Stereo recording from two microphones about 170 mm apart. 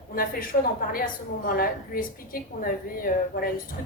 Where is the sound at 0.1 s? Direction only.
60° left (ahead or behind).